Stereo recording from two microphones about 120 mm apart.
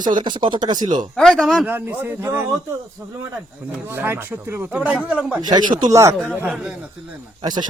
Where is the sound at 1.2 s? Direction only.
Centre (ahead or behind).